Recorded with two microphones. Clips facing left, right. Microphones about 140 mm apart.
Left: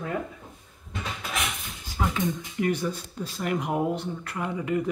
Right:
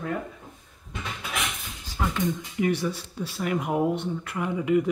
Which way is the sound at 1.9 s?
5° left (ahead or behind).